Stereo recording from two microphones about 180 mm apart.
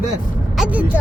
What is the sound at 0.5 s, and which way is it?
Speech, 5° right (ahead or behind).